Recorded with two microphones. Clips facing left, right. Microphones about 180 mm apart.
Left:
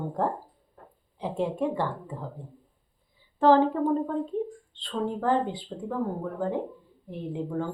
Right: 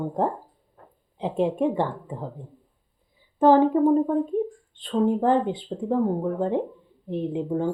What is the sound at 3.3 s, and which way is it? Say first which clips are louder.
Speech: right 3 dB; 20° right (ahead or behind).